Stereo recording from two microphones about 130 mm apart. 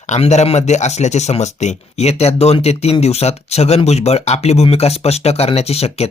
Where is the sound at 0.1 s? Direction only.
60° left (ahead or behind).